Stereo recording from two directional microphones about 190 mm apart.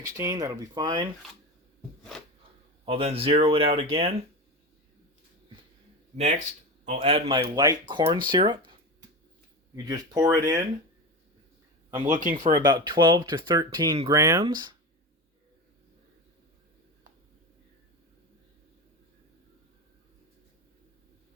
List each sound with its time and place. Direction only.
0.0 s speech: 20° right (ahead or behind)
2.8 s speech: 30° right (ahead or behind)
6.8 s speech: 35° right (ahead or behind)
9.7 s speech: 20° right (ahead or behind)
12.0 s speech: 40° right (ahead or behind)
12.3 s speech: 20° right (ahead or behind)